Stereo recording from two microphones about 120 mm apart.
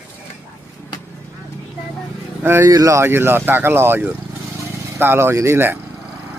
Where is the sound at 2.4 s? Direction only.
20° right (ahead or behind).